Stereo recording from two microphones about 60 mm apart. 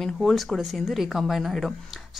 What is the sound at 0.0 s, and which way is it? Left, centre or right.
A woman's voice, centre.